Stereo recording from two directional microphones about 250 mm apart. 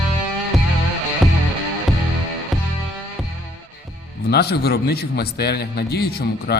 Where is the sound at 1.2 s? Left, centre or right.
Centre.